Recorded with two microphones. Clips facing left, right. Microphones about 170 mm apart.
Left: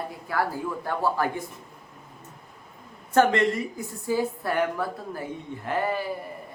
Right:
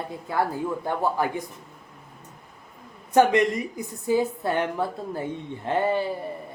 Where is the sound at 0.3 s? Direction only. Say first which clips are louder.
Right 2 dB; 20° right (ahead or behind).